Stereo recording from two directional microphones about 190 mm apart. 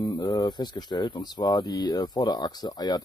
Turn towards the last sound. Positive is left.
turn(degrees=20)  # may be behind; listen again after turning